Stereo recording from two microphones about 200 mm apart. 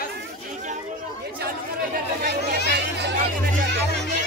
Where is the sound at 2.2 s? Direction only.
55° right (ahead or behind).